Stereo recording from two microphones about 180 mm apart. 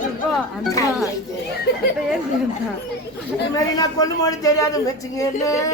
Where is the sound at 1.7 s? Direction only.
65° left (ahead or behind).